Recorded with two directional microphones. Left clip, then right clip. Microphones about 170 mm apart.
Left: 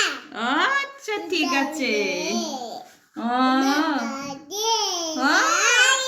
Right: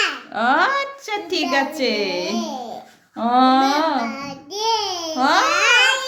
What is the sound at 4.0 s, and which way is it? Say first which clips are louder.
Child singing: right 4 dB; 5° left (ahead or behind).